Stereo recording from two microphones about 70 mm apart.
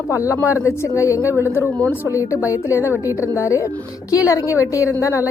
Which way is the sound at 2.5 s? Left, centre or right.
Left.